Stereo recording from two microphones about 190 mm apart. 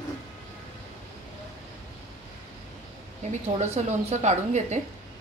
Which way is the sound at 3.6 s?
35° right (ahead or behind).